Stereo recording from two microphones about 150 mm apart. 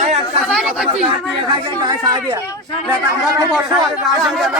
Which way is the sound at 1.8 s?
25° right (ahead or behind).